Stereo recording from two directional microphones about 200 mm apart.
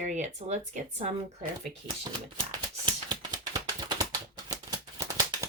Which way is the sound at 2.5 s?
20° right (ahead or behind).